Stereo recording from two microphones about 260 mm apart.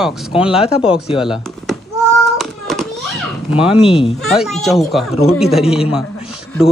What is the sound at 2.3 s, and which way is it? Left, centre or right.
Child singing, centre.